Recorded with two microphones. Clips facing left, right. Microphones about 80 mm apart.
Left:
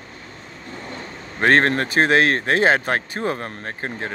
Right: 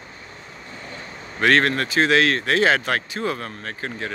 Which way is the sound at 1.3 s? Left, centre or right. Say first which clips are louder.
Left 2 dB; left.